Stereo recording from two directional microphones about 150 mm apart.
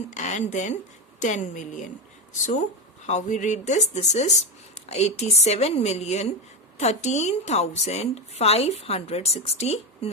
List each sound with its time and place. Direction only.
0.1 s a woman's voice: 50° left (ahead or behind)